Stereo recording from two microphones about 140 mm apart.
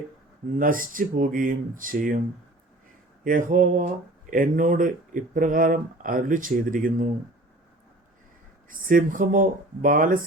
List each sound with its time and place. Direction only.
0.6 s speech: 80° right
3.2 s speech: 70° right (ahead or behind)
8.7 s speech: 75° right (ahead or behind)